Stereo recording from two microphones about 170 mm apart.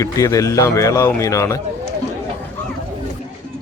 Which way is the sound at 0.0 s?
20° left (ahead or behind).